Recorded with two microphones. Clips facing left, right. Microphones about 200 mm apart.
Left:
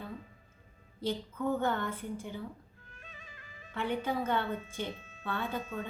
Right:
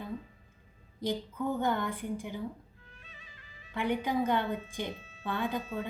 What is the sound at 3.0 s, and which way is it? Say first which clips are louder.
Music: left 6 dB; 50° left (ahead or behind).